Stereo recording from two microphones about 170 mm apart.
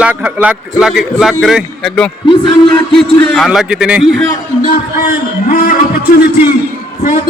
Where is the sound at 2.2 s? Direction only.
30° left (ahead or behind).